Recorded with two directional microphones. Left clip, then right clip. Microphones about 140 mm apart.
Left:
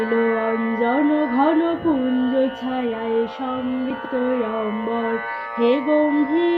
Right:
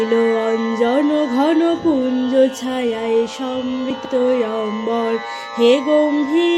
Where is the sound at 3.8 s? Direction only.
35° right (ahead or behind).